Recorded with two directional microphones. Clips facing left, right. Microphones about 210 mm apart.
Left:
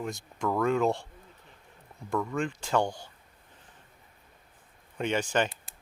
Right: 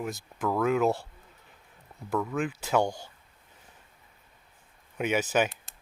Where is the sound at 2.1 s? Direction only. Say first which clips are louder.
Right 1 dB; 5° right (ahead or behind).